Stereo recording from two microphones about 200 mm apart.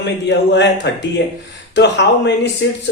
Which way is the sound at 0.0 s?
60° left (ahead or behind).